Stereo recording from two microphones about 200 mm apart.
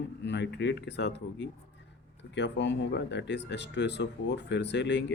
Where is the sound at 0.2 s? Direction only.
60° left (ahead or behind).